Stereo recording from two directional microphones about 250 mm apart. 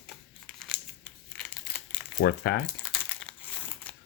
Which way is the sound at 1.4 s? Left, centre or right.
Centre.